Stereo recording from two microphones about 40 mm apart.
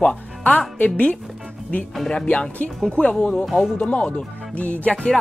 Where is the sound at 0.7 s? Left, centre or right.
Left.